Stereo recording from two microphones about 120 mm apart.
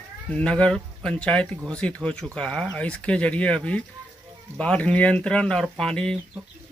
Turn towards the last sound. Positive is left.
turn(degrees=5)  # may be behind; listen again after turning